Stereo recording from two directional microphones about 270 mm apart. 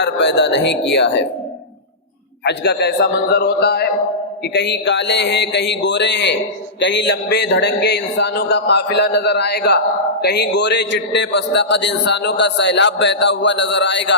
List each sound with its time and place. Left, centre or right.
0.0 s a man's voice: left
2.4 s a man's voice: left